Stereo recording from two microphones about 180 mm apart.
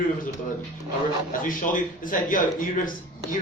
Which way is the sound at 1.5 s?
50° left (ahead or behind).